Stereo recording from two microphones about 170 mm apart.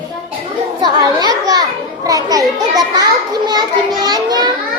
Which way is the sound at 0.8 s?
25° right (ahead or behind).